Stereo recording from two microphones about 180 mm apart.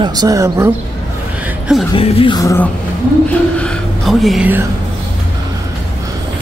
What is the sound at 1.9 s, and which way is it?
Music, 30° left (ahead or behind).